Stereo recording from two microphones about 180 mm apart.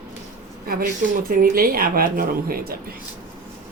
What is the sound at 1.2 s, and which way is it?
Speech, 50° right (ahead or behind).